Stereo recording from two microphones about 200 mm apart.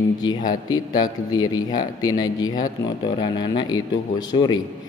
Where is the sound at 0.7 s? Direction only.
20° left (ahead or behind).